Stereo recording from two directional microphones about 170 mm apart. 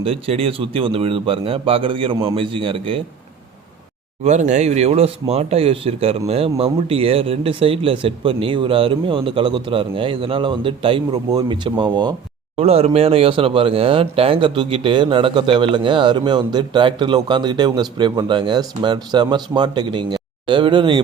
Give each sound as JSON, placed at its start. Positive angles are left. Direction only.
{"t": 0.0, "sound": "speech", "side_deg": -35}
{"t": 4.2, "sound": "speech", "side_deg": -45}
{"t": 12.5, "sound": "speech", "side_deg": -35}